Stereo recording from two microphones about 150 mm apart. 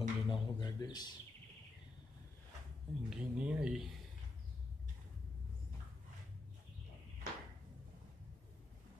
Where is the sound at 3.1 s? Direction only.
5° right (ahead or behind).